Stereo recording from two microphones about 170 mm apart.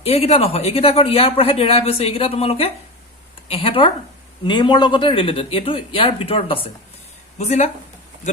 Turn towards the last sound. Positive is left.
turn(degrees=45)  # may be behind; listen again after turning